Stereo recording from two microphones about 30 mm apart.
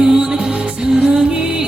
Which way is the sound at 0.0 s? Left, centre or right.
Right.